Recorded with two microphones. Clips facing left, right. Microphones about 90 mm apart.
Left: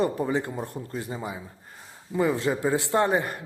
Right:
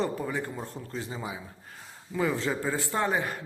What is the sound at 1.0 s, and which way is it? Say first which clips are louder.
Speech: left 2 dB; 5° left (ahead or behind).